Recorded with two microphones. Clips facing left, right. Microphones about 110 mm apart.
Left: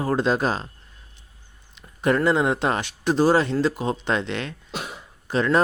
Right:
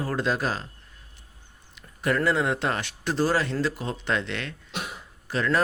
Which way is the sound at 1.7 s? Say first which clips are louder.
Left 4 dB; 25° left (ahead or behind).